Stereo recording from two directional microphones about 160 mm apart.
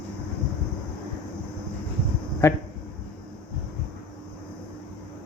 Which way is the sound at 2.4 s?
15° left (ahead or behind).